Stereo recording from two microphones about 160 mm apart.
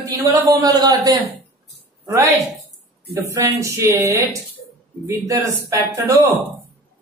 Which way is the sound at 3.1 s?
20° right (ahead or behind).